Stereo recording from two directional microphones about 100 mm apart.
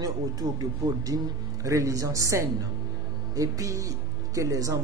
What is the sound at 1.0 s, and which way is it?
Speech, 35° right (ahead or behind).